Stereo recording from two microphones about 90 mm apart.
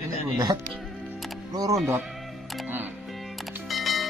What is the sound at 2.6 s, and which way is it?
Music, 20° right (ahead or behind).